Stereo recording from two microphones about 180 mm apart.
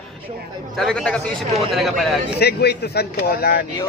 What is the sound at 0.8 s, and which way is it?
A man's voice, 5° left (ahead or behind).